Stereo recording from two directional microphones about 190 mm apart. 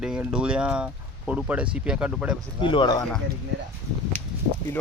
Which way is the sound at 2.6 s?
25° left (ahead or behind).